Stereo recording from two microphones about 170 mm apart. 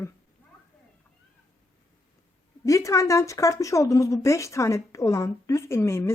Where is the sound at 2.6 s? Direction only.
20° left (ahead or behind).